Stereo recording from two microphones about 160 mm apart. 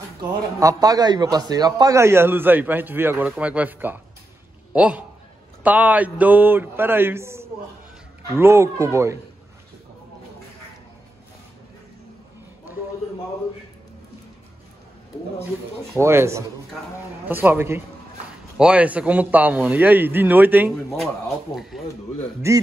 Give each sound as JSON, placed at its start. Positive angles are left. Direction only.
{"t": 0.2, "sound": "a man's voice", "side_deg": -20}
{"t": 15.9, "sound": "a man's voice", "side_deg": -15}
{"t": 21.5, "sound": "speech", "side_deg": 0}
{"t": 22.5, "sound": "a man's voice", "side_deg": -20}